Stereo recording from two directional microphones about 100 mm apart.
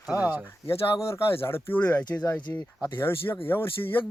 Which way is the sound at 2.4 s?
45° left (ahead or behind).